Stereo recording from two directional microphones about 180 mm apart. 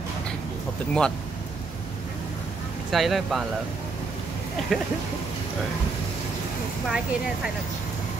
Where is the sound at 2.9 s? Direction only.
Centre (ahead or behind).